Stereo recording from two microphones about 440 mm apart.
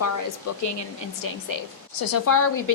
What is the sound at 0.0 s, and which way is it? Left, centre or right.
Speech, left.